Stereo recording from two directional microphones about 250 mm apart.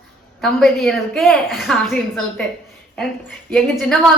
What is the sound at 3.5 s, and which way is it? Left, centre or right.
Speech, centre.